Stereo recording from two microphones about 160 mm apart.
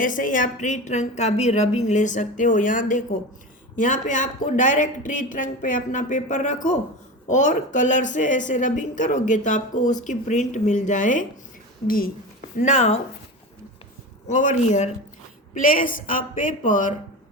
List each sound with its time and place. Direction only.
0.0 s a woman's voice: 55° left (ahead or behind)
11.9 s a sound: 65° left (ahead or behind)
12.6 s a woman's voice: 45° left (ahead or behind)
14.3 s a woman's voice: 50° left (ahead or behind)